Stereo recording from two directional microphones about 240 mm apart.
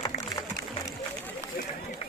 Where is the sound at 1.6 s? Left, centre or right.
Left.